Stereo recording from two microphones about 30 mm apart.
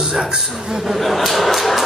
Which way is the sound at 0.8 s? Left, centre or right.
Centre.